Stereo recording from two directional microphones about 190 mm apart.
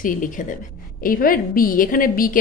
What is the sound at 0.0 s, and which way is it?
A woman's voice, 45° left (ahead or behind).